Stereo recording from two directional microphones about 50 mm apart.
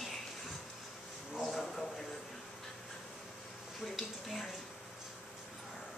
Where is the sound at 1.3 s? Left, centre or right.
Centre.